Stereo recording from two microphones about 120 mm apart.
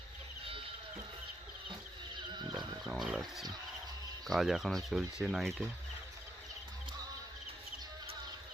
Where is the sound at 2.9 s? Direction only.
5° right (ahead or behind).